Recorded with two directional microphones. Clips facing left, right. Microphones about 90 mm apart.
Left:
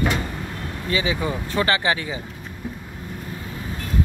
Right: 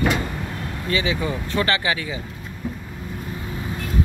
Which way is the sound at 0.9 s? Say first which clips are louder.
Even; 20° left (ahead or behind).